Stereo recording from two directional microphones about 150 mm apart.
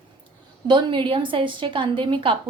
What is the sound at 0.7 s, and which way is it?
A woman's voice, 30° right (ahead or behind).